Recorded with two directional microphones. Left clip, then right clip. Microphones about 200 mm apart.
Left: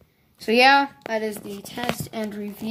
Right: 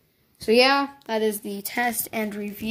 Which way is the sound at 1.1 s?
30° right (ahead or behind).